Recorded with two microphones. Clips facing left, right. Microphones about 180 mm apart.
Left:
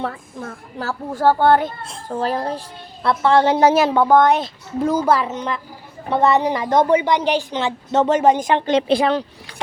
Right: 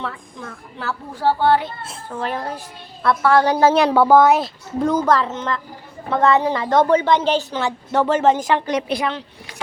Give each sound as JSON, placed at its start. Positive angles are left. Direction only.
{"t": 0.0, "sound": "a woman's voice", "side_deg": 40}
{"t": 2.1, "sound": "a child's voice", "side_deg": 35}
{"t": 3.8, "sound": "a woman's voice", "side_deg": -5}